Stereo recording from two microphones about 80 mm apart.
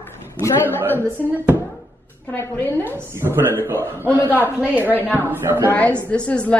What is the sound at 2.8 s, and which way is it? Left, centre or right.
Speech, right.